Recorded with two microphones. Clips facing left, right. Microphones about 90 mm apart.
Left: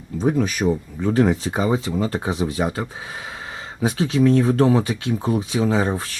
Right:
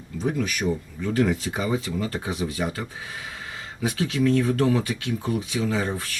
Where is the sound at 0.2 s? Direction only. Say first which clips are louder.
Left 6 dB; 35° left (ahead or behind).